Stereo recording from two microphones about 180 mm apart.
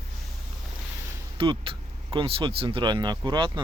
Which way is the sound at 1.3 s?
30° right (ahead or behind).